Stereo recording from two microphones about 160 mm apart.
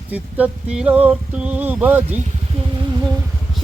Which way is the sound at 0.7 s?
5° right (ahead or behind).